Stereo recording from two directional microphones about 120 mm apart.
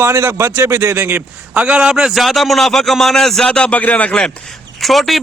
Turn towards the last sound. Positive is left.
turn(degrees=0)  # may be behind; listen again after turning